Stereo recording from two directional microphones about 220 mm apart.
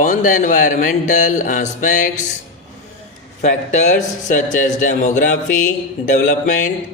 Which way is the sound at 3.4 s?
35° left (ahead or behind).